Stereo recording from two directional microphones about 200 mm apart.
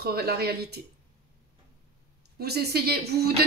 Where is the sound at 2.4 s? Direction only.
55° right (ahead or behind).